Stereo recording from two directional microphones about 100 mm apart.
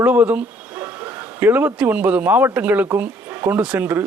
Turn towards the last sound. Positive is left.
turn(degrees=-20)  # may be behind; listen again after turning